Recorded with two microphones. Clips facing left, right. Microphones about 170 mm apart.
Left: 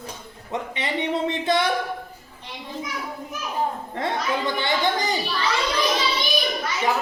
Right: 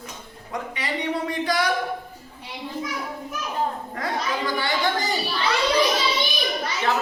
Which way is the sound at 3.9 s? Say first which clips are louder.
Left 2 dB; 25° left (ahead or behind).